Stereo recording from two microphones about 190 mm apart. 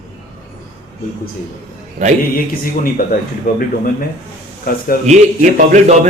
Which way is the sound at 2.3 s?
50° left (ahead or behind).